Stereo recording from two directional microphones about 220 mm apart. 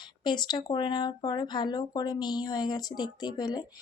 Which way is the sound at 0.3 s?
20° left (ahead or behind).